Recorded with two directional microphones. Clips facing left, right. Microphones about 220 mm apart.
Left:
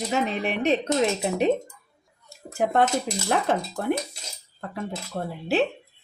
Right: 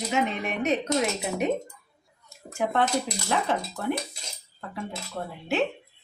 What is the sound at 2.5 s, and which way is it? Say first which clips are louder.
Speech: left 3 dB; 45° left (ahead or behind).